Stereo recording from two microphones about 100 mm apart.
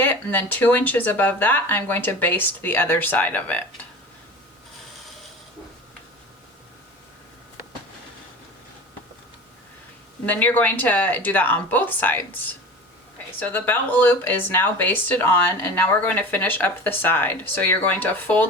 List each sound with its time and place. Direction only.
0.0 s speech: 20° left (ahead or behind)
10.2 s speech: 15° left (ahead or behind)